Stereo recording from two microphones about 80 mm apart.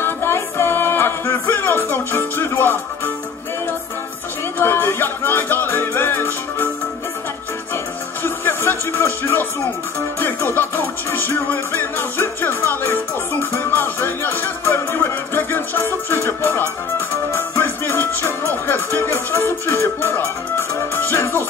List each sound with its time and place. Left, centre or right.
0.0 s music: left
4.6 s music: left
7.7 s music: left